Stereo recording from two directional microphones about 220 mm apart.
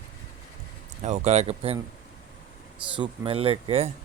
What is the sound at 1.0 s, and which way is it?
Speech, 30° right (ahead or behind).